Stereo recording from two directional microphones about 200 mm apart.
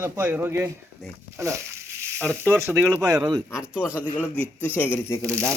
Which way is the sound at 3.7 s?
10° left (ahead or behind).